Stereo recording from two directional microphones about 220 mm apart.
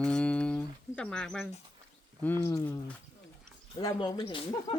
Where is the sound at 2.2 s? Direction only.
10° left (ahead or behind).